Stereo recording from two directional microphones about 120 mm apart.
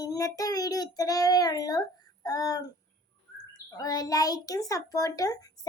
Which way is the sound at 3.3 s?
30° left (ahead or behind).